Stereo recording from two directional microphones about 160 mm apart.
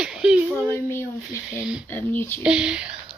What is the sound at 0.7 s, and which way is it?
Speech, 15° left (ahead or behind).